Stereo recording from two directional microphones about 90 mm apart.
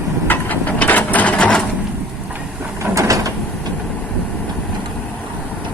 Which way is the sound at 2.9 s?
40° right (ahead or behind).